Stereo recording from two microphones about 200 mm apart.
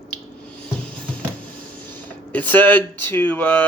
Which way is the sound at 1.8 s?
10° left (ahead or behind).